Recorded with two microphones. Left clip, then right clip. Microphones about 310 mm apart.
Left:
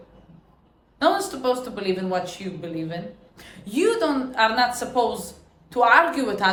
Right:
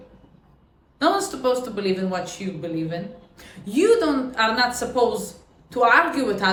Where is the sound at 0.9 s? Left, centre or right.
Centre.